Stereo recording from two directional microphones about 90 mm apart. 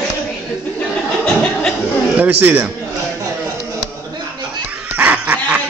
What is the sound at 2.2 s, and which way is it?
Speech, 20° right (ahead or behind).